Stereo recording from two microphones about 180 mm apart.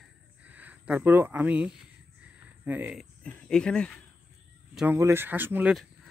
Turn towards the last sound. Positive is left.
turn(degrees=-10)  # may be behind; listen again after turning